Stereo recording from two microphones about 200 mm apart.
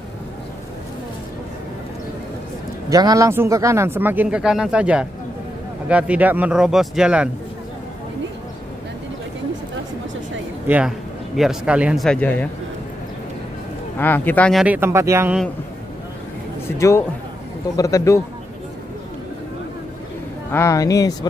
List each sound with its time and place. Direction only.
2.9 s speech: 15° right (ahead or behind)
10.7 s a man's voice: 5° right (ahead or behind)
13.9 s speech: 10° left (ahead or behind); by 15.3 s 15° right (ahead or behind)
16.7 s speech: 15° left (ahead or behind)
20.5 s speech: 15° left (ahead or behind)